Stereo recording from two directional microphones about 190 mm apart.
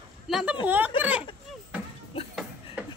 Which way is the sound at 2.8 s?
5° right (ahead or behind).